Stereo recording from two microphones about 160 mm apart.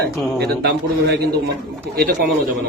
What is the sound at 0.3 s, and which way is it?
Speech, 90° right.